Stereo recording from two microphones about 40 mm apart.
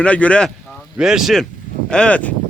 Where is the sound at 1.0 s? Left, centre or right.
Centre.